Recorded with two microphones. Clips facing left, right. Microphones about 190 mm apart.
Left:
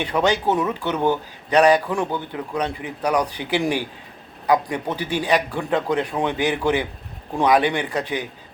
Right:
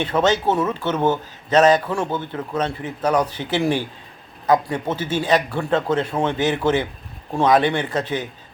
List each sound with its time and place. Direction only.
0.0 s a man's voice: 15° left (ahead or behind)
0.9 s speech: 20° right (ahead or behind)
1.5 s a man's voice: 15° left (ahead or behind)